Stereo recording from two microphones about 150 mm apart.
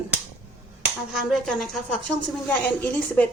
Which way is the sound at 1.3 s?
5° left (ahead or behind).